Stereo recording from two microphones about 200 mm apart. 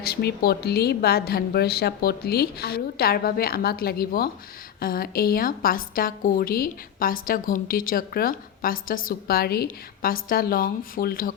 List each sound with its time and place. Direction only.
0.0 s a woman's voice: 55° left (ahead or behind)